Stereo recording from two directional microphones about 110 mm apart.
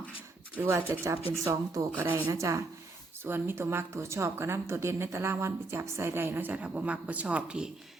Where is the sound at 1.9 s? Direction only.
15° right (ahead or behind).